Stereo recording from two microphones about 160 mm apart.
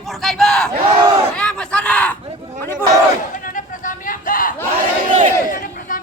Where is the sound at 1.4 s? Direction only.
5° left (ahead or behind).